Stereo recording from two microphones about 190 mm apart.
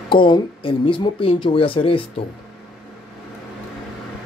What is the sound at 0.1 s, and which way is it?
Speech, 25° left (ahead or behind).